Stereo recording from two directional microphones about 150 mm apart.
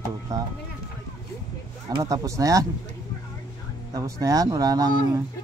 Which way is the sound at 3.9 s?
20° right (ahead or behind).